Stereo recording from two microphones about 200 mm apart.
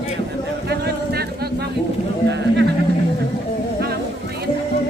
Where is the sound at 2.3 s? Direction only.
60° right (ahead or behind).